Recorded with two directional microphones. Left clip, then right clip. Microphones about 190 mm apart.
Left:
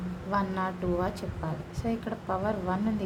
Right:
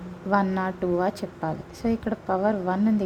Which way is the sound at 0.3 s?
35° right (ahead or behind).